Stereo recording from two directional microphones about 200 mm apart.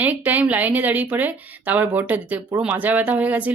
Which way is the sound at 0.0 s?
10° right (ahead or behind).